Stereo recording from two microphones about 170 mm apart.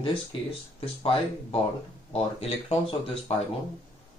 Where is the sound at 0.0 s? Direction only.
30° left (ahead or behind).